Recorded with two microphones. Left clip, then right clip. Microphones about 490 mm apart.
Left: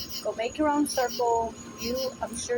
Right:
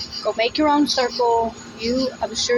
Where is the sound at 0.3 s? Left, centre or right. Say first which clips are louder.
Right 8 dB; left.